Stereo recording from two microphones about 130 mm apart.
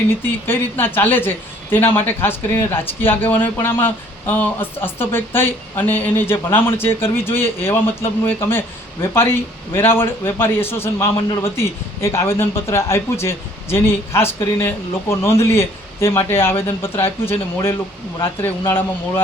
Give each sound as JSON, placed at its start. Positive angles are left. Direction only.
{"t": 0.4, "sound": "speech", "side_deg": 15}